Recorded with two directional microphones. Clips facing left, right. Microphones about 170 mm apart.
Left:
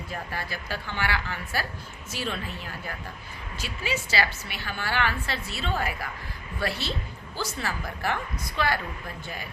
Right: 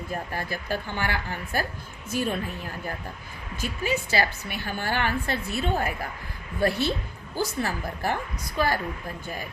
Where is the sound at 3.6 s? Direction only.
50° right (ahead or behind).